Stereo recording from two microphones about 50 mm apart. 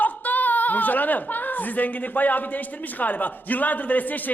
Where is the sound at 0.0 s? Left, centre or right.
Left.